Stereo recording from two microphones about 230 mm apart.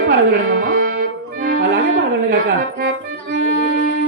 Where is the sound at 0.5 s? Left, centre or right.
Right.